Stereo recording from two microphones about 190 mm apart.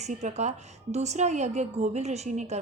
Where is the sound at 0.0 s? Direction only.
40° right (ahead or behind).